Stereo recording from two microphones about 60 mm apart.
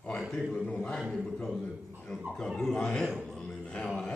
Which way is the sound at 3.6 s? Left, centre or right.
Centre.